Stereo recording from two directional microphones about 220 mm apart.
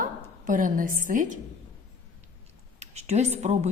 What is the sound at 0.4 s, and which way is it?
Speech, 35° right (ahead or behind).